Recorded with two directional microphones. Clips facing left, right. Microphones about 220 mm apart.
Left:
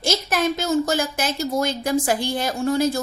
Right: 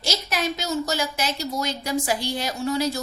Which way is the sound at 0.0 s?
50° left (ahead or behind).